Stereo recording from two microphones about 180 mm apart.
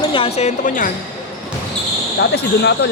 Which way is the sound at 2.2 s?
70° left (ahead or behind).